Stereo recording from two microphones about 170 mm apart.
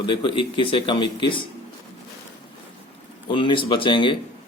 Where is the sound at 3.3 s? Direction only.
30° left (ahead or behind).